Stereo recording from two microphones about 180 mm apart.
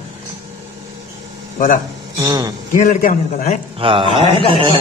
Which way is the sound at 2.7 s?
45° left (ahead or behind).